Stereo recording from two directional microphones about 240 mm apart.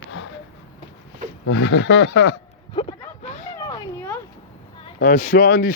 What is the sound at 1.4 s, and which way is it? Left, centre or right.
Speech, left.